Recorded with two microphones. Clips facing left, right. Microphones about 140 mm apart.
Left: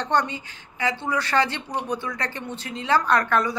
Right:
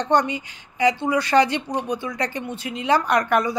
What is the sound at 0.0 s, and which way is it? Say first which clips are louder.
Speech: right 4 dB; 15° right (ahead or behind).